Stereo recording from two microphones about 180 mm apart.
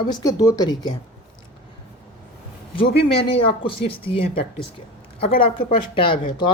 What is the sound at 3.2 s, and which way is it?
A woman's voice, 30° left (ahead or behind).